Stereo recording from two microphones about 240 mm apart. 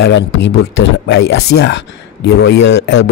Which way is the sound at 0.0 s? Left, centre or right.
Left.